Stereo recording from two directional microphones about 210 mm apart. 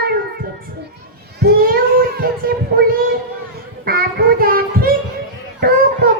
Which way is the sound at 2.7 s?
45° right (ahead or behind).